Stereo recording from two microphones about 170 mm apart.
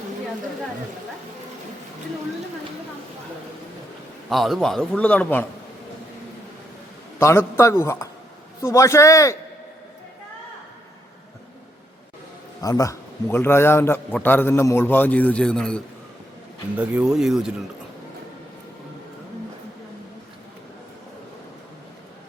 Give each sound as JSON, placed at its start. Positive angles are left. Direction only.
{"t": 4.3, "sound": "a man's voice", "side_deg": 0}
{"t": 7.2, "sound": "a man's voice", "side_deg": 15}
{"t": 12.6, "sound": "a man's voice", "side_deg": 20}
{"t": 16.7, "sound": "a man's voice", "side_deg": -10}